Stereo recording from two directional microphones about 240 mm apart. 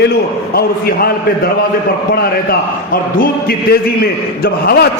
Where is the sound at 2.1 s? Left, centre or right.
Left.